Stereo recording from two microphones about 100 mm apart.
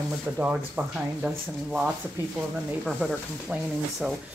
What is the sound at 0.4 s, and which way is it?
Speech, 15° right (ahead or behind).